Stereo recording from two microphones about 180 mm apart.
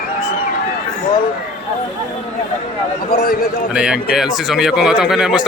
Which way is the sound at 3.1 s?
55° left (ahead or behind).